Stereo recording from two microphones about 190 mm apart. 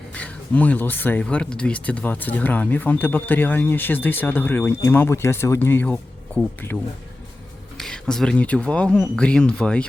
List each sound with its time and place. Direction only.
0.1 s speech: 10° left (ahead or behind)
7.8 s speech: 5° left (ahead or behind)